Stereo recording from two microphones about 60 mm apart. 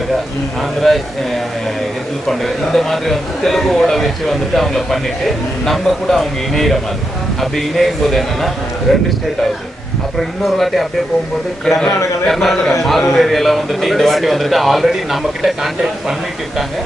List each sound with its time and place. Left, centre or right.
0.8 s a man's voice: centre
10.2 s a man's voice: centre
12.2 s a man's voice: centre